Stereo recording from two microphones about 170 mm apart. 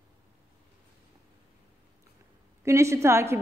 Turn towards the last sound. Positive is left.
turn(degrees=-15)  # may be behind; listen again after turning